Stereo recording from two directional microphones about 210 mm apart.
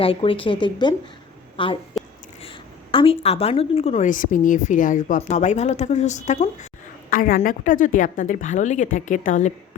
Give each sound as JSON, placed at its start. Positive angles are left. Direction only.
{"t": 0.0, "sound": "a woman's voice", "side_deg": 25}